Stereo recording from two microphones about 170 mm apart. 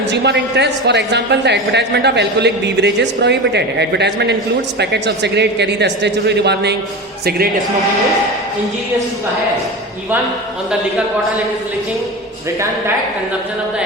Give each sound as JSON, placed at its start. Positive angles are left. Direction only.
{"t": 0.1, "sound": "a woman's voice", "side_deg": -90}
{"t": 10.7, "sound": "a man's voice", "side_deg": -5}